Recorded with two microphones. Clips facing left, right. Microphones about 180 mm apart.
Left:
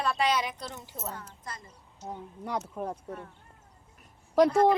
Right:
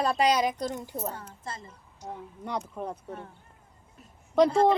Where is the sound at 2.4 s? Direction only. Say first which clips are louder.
Even; 5° left (ahead or behind).